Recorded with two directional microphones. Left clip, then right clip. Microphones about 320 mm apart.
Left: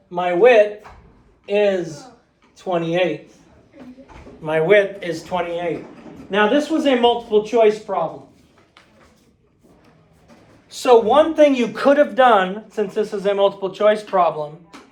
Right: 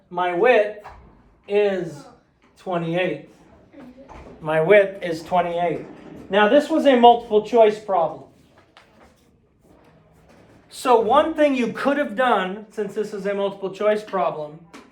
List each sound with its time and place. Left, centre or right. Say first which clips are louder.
0.1 s a man's voice: left 4 dB; centre
4.4 s speech: even; centre
10.8 s speech: left 3 dB; centre; by 14.4 s left